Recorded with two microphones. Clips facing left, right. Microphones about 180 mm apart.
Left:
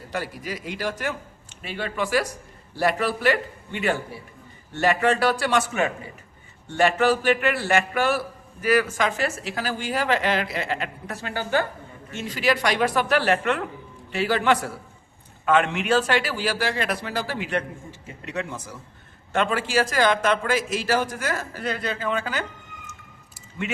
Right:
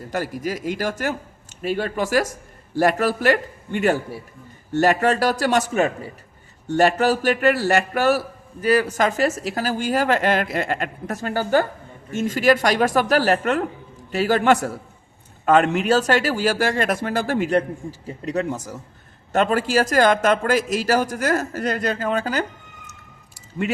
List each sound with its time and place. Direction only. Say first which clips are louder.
0.1 s a man's voice: right 5 dB; 45° right (ahead or behind)
8.6 s speech: right 2 dB; 30° right (ahead or behind)
9.0 s a man's voice: right 5 dB; 40° right (ahead or behind)